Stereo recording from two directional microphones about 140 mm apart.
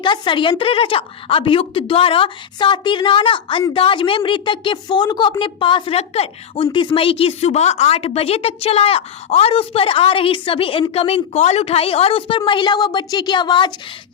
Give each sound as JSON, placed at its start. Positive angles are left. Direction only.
{"t": 0.0, "sound": "a woman's voice", "side_deg": 35}